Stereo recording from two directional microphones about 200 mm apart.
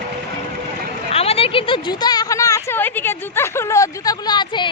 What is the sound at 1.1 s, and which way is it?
Speech, 30° left (ahead or behind).